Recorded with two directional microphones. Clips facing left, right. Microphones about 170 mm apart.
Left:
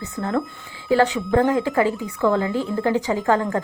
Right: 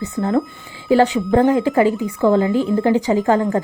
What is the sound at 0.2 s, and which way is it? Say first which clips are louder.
A woman's voice: right 5 dB; 20° right (ahead or behind).